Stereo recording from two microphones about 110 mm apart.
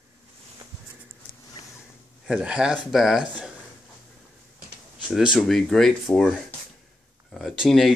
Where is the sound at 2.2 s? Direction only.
5° right (ahead or behind).